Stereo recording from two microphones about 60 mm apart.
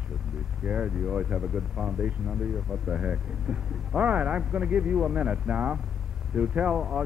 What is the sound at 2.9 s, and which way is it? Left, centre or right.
Speech, centre.